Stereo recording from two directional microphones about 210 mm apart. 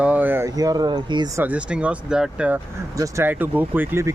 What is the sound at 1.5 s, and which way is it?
Speech, 5° right (ahead or behind).